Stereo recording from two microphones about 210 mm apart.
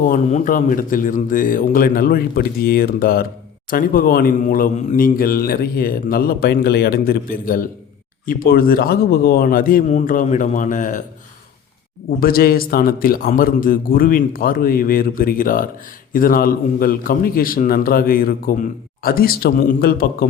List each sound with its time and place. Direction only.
0.1 s a man's voice: 35° left (ahead or behind)
12.2 s a man's voice: 45° left (ahead or behind)